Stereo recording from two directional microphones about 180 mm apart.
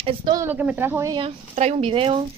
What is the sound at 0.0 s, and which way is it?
Speech, 30° right (ahead or behind).